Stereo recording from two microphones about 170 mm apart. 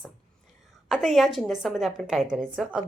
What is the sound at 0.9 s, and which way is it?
A woman's voice, centre (ahead or behind).